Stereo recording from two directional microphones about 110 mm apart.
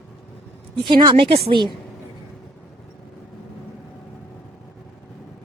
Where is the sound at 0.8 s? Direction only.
45° right (ahead or behind); by 1.5 s 65° right (ahead or behind).